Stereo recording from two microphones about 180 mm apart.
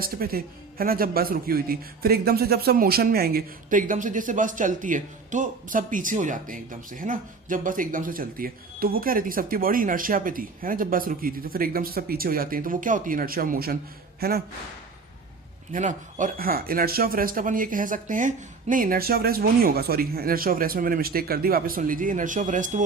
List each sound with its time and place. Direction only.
0.0 s speech: 55° right (ahead or behind)
15.7 s speech: 45° right (ahead or behind)